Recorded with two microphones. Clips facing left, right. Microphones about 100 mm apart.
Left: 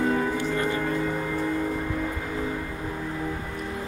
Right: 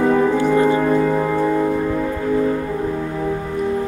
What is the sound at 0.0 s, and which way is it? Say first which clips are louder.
Music: right 9 dB; 55° right (ahead or behind).